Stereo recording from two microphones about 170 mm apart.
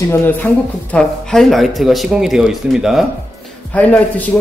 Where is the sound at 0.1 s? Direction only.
10° left (ahead or behind).